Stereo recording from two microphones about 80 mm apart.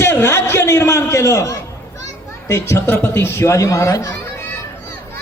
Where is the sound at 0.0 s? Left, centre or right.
Left.